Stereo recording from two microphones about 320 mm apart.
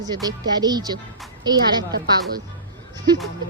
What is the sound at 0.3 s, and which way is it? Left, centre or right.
Speech, centre.